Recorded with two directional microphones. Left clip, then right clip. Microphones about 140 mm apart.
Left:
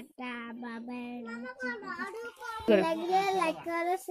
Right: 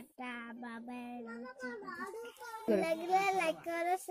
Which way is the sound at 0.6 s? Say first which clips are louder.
Left 5 dB; 5° right (ahead or behind).